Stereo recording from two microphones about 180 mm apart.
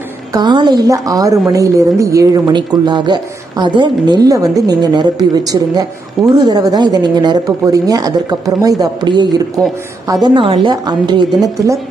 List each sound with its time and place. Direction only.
0.3 s speech: 25° right (ahead or behind)